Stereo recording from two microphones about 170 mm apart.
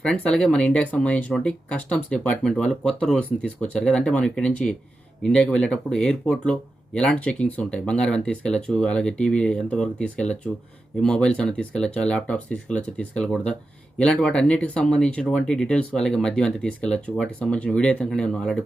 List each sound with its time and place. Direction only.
0.0 s speech: 5° left (ahead or behind)